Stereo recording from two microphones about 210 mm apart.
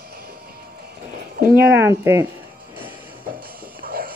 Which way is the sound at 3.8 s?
40° right (ahead or behind).